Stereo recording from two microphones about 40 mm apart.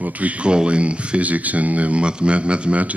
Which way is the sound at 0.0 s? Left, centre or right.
Right.